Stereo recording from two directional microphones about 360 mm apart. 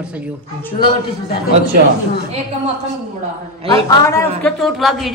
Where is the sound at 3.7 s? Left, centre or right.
Centre.